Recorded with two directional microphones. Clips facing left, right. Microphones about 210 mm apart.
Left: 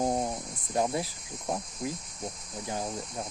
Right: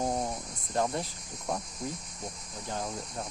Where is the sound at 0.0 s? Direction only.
15° left (ahead or behind).